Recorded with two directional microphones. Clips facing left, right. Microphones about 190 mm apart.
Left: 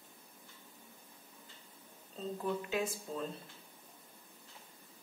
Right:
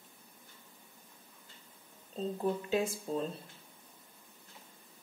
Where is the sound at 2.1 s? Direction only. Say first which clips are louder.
Right 4 dB; 30° right (ahead or behind).